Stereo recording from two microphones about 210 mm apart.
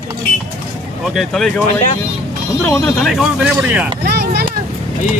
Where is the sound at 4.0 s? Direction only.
50° right (ahead or behind).